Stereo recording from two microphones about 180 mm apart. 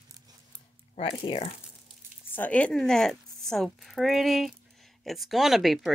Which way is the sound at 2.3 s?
10° left (ahead or behind).